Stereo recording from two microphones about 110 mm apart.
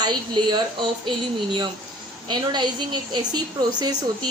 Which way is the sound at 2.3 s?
40° right (ahead or behind).